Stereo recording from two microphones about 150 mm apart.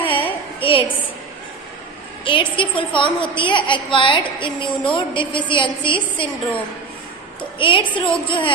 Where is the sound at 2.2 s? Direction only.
35° left (ahead or behind).